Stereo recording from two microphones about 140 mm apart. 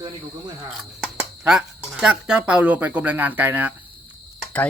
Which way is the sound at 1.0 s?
5° right (ahead or behind).